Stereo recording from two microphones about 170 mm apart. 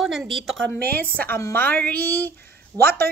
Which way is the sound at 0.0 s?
Centre (ahead or behind).